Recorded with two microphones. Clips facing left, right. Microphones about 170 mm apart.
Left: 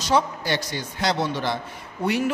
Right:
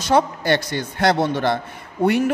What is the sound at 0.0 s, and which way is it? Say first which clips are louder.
A man's voice: right 4 dB; 55° right (ahead or behind).